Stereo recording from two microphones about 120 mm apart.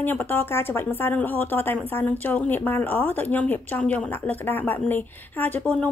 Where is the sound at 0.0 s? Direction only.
15° left (ahead or behind).